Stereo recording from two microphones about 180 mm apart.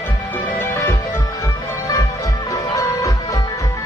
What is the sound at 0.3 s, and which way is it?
Music, 10° left (ahead or behind).